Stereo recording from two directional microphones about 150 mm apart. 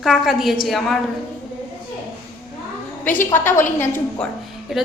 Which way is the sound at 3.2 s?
15° left (ahead or behind).